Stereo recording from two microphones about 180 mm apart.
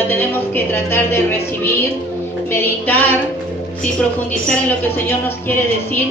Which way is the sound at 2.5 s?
10° left (ahead or behind).